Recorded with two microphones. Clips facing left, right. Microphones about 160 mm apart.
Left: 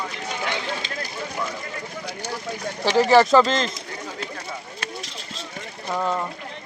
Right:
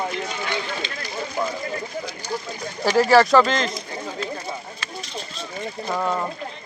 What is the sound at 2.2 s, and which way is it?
Speech, 75° left (ahead or behind).